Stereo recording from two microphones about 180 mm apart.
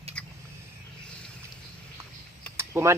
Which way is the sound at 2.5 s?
15° right (ahead or behind).